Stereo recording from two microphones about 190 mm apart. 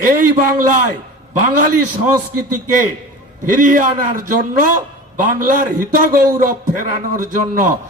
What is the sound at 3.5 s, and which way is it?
A man's voice, 45° right (ahead or behind).